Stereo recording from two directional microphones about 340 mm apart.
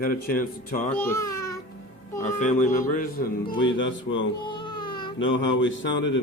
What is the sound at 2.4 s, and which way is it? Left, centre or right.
A man's voice, left.